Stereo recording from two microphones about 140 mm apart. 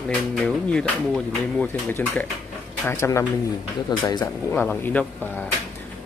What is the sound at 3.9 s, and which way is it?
Speech, 30° left (ahead or behind).